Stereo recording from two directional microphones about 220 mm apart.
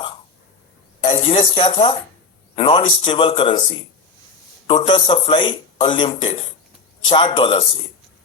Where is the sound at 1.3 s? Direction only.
25° left (ahead or behind).